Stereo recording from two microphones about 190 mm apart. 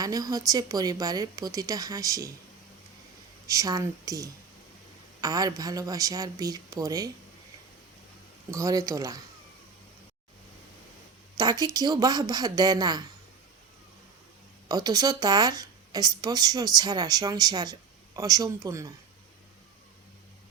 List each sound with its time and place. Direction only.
0.0 s speech: 20° right (ahead or behind)
3.4 s speech: 15° right (ahead or behind)
8.4 s speech: 15° right (ahead or behind)
11.3 s speech: 20° right (ahead or behind)
14.7 s speech: 20° right (ahead or behind)